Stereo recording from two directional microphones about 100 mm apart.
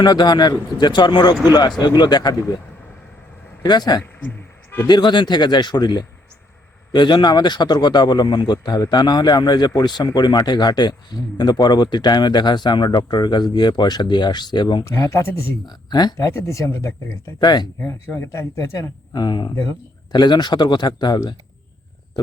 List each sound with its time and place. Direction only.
0.0 s speech: 45° left (ahead or behind)
3.6 s speech: 45° left (ahead or behind)
4.0 s a sound: 20° left (ahead or behind)
4.9 s speech: 45° left (ahead or behind)
14.8 s speech: 35° left (ahead or behind)
16.1 s speech: 30° left (ahead or behind)
17.4 s speech: 45° left (ahead or behind)
17.8 s speech: 25° left (ahead or behind)
19.1 s speech: 50° left (ahead or behind)